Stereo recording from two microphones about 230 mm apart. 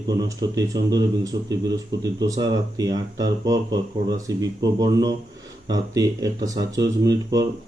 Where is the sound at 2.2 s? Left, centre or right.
Centre.